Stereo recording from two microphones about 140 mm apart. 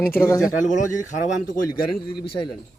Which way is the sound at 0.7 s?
65° left (ahead or behind).